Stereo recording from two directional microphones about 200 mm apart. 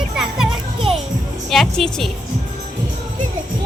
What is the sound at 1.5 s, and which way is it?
Speech, centre (ahead or behind).